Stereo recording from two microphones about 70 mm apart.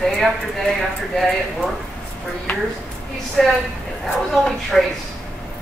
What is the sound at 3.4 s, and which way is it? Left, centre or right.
Speech, centre.